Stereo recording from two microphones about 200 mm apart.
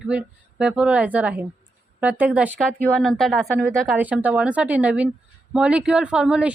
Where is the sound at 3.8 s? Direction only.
5° right (ahead or behind).